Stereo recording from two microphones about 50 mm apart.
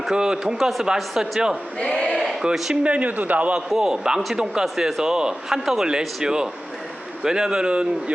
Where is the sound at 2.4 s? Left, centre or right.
Centre.